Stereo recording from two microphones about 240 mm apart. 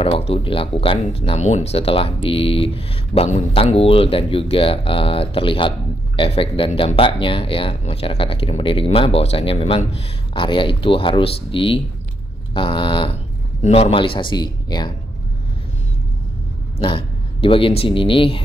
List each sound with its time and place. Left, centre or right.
0.0 s speech: left
16.7 s speech: left